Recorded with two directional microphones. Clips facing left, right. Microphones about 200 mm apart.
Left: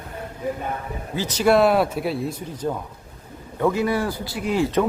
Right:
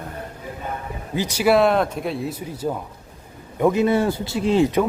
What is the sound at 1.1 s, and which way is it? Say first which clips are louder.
Speech: even; 15° right (ahead or behind).